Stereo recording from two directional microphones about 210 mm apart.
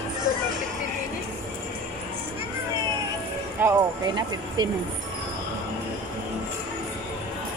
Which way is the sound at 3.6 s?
10° right (ahead or behind).